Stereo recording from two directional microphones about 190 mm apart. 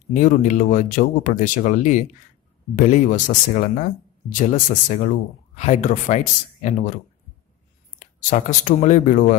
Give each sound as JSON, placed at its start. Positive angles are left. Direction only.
{"t": 0.1, "sound": "speech", "side_deg": 40}
{"t": 8.0, "sound": "speech", "side_deg": 40}